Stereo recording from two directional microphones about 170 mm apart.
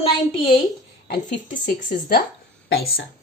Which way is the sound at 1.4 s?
50° left (ahead or behind).